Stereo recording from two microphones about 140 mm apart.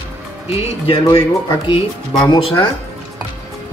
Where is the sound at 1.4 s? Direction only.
35° left (ahead or behind).